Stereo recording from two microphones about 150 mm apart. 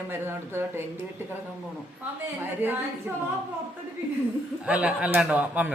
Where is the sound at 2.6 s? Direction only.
15° right (ahead or behind).